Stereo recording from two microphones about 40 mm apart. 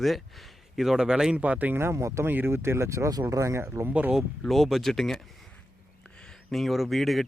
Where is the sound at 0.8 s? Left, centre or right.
Centre.